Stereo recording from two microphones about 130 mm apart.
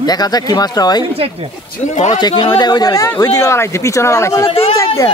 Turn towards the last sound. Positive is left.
turn(degrees=50)  # may be behind; listen again after turning